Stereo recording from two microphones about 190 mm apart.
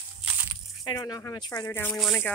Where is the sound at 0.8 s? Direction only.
20° left (ahead or behind).